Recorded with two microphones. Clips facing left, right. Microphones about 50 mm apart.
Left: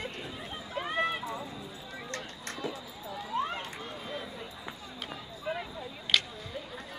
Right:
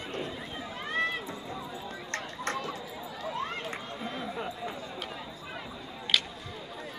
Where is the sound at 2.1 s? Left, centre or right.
Right.